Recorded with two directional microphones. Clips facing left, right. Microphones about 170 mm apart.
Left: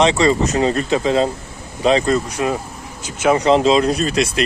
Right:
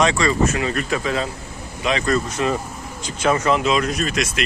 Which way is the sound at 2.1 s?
10° left (ahead or behind).